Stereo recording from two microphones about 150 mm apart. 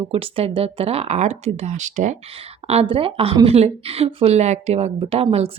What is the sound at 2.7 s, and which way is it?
A woman's voice, 40° right (ahead or behind).